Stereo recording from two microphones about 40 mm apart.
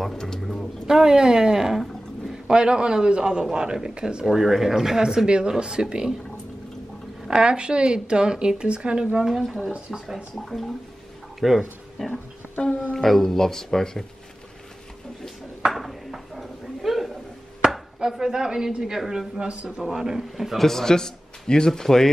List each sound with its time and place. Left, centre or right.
0.0 s speech: centre
0.8 s a woman's voice: centre
7.2 s a woman's voice: right
9.9 s speech: centre
10.3 s speech: centre
12.9 s a man's voice: centre
15.7 s ping: centre
17.6 s chopping: centre
18.9 s speech: centre
19.4 s a woman's voice: right
19.9 s speech: centre
20.5 s a man's voice: centre